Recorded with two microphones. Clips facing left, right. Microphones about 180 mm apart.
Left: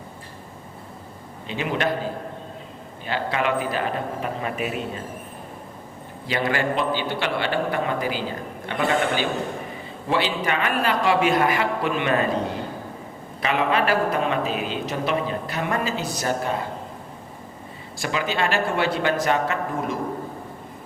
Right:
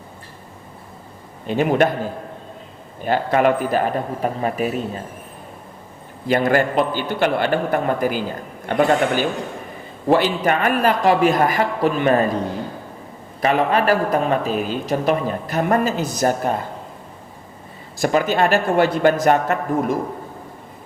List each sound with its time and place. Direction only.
1.5 s a man's voice: 50° right (ahead or behind)
3.0 s a man's voice: 50° right (ahead or behind)
6.2 s a man's voice: 50° right (ahead or behind)
13.4 s a man's voice: 45° right (ahead or behind)
18.0 s a man's voice: 50° right (ahead or behind)